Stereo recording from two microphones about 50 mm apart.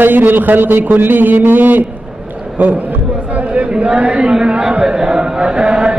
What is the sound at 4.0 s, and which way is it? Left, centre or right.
Chant, right.